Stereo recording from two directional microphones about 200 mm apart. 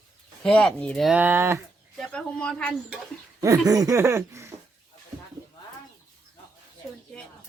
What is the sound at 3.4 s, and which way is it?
Speech, 15° right (ahead or behind).